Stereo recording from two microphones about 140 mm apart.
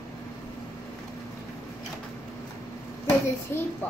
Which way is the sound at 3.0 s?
15° left (ahead or behind).